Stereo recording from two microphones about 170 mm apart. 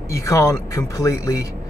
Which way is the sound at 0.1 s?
20° left (ahead or behind).